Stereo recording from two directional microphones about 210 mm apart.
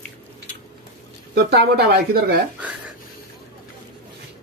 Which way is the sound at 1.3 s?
45° right (ahead or behind).